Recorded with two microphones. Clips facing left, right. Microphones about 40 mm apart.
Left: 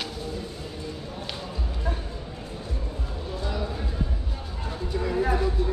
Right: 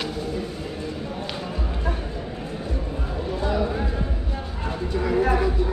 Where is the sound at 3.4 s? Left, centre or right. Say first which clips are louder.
Right 8 dB; right.